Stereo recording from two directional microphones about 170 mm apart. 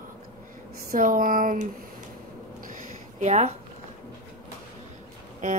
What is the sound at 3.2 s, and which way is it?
Speech, 40° right (ahead or behind).